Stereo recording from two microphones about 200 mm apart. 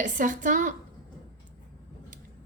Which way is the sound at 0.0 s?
40° right (ahead or behind).